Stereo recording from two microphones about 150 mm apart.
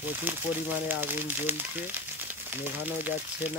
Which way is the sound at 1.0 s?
10° right (ahead or behind).